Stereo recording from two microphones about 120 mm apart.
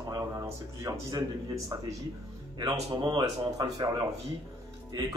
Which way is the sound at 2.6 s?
35° right (ahead or behind).